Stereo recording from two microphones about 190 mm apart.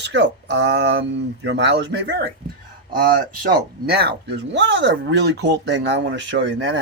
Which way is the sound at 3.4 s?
55° right (ahead or behind).